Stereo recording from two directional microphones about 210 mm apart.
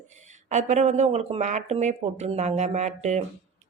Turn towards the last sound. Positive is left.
turn(degrees=-35)  # may be behind; listen again after turning